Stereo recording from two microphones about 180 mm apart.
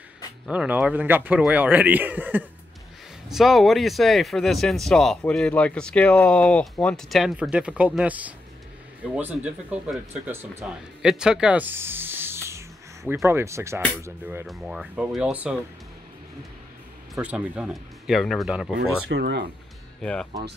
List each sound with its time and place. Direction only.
0.5 s speech: 10° right (ahead or behind)
14.4 s speech: centre (ahead or behind)
17.1 s speech: 5° right (ahead or behind)
18.8 s speech: 65° right (ahead or behind)
20.0 s speech: 5° left (ahead or behind)